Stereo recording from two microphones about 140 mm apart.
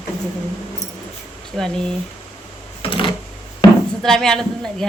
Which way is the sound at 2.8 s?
40° left (ahead or behind).